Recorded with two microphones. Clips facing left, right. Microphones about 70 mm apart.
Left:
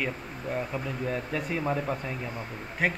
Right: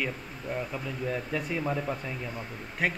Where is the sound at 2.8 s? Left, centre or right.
Centre.